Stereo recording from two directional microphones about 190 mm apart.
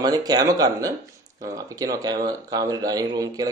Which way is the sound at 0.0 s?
20° right (ahead or behind).